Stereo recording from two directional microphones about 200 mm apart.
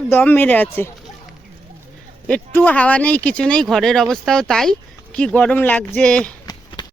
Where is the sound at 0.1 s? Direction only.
10° left (ahead or behind).